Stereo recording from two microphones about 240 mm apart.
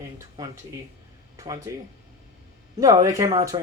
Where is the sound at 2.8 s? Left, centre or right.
Centre.